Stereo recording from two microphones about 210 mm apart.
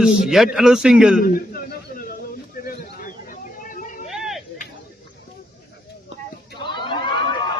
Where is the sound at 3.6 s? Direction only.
40° left (ahead or behind).